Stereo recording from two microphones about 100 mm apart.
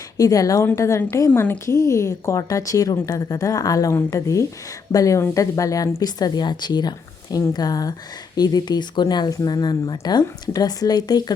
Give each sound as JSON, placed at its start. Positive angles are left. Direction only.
{"t": 0.2, "sound": "speech", "side_deg": 35}